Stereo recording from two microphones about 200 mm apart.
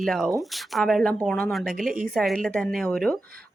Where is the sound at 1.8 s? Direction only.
40° right (ahead or behind).